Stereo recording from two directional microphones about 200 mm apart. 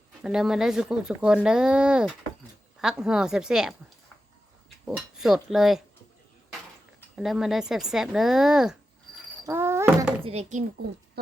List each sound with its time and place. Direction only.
0.2 s speech: 5° right (ahead or behind)
4.9 s speech: 5° right (ahead or behind)
7.2 s speech: centre (ahead or behind)
9.4 s a sound: 10° right (ahead or behind)
10.2 s speech: 30° right (ahead or behind)